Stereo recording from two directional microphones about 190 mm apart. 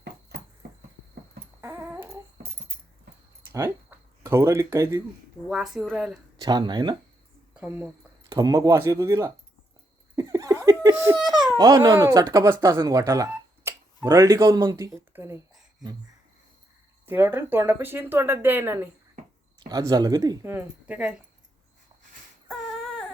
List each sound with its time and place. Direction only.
1.6 s dog: 15° right (ahead or behind)
3.5 s speech: 15° right (ahead or behind)
5.5 s speech: 5° right (ahead or behind)
6.4 s speech: 20° right (ahead or behind)
7.5 s speech: 10° right (ahead or behind)
8.3 s speech: 20° right (ahead or behind)
10.2 s laughter: 20° right (ahead or behind)
11.5 s speech: 20° right (ahead or behind)
17.1 s speech: 10° right (ahead or behind)